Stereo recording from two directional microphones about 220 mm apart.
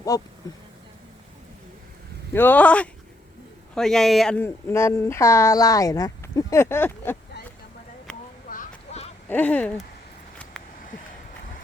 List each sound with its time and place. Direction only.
0.1 s speech: 15° left (ahead or behind)
2.3 s speech: 10° left (ahead or behind)
8.4 s a sound: 35° left (ahead or behind)
9.3 s speech: 5° left (ahead or behind)